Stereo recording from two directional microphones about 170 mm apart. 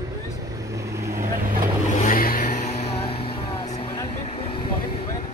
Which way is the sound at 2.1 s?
55° left (ahead or behind).